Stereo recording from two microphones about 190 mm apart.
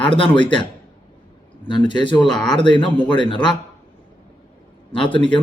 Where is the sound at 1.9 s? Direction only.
25° left (ahead or behind).